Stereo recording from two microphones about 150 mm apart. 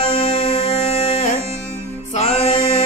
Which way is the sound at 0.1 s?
45° left (ahead or behind).